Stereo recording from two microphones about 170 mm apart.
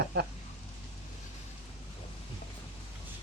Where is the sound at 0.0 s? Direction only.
80° right.